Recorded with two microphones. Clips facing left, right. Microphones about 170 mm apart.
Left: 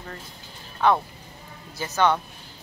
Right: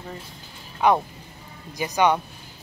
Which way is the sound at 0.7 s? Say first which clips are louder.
Right 1 dB; 15° right (ahead or behind).